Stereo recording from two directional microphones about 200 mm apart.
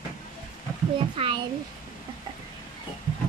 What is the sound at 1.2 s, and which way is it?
Speech, 25° right (ahead or behind).